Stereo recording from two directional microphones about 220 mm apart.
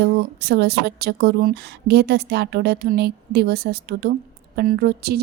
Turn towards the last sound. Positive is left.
turn(degrees=-45)  # may be behind; listen again after turning